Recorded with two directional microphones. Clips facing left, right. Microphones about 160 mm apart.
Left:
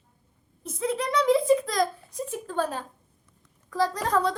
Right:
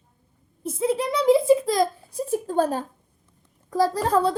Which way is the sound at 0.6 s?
5° right (ahead or behind).